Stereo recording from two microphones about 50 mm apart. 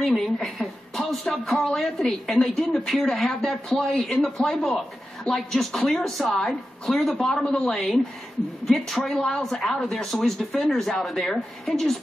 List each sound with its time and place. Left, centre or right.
0.0 s speech: centre